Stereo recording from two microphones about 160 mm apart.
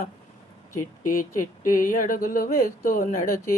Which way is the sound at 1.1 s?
55° left (ahead or behind).